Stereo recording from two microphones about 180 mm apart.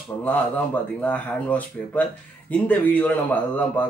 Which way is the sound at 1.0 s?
10° left (ahead or behind).